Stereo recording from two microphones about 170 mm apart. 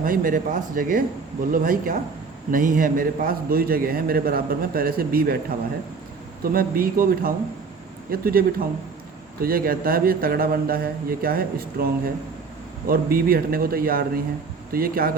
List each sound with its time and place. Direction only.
0.0 s a man's voice: 55° right (ahead or behind)